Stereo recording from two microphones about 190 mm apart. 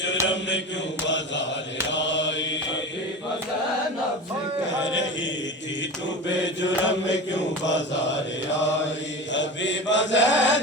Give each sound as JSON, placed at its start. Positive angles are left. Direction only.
{"t": 0.3, "sound": "mantra", "side_deg": 70}
{"t": 4.8, "sound": "mantra", "side_deg": 70}
{"t": 6.4, "sound": "mantra", "side_deg": 70}